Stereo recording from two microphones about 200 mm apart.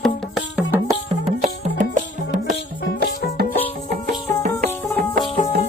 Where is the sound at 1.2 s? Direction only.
35° right (ahead or behind).